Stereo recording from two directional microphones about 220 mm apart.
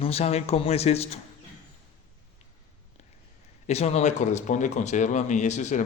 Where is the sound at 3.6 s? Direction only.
30° left (ahead or behind).